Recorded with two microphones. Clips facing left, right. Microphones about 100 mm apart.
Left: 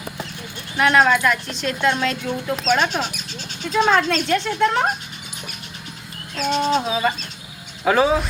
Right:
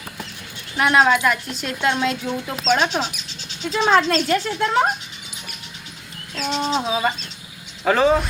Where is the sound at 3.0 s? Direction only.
50° left (ahead or behind).